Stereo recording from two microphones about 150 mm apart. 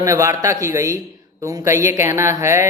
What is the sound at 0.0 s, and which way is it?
Speech, 20° right (ahead or behind).